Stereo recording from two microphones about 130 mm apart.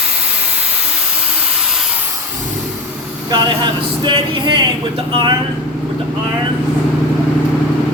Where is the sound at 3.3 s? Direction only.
35° right (ahead or behind).